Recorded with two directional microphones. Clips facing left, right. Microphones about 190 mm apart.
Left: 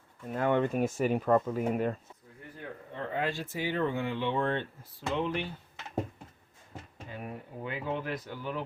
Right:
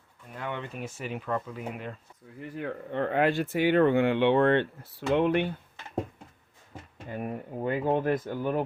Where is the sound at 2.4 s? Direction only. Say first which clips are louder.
Right 9 dB; 80° right; by 5.6 s 60° right (ahead or behind).